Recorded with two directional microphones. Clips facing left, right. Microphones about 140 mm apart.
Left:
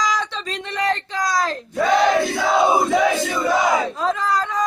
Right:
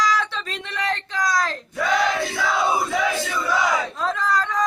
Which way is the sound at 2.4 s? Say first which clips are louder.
Left 5 dB; 45° left (ahead or behind).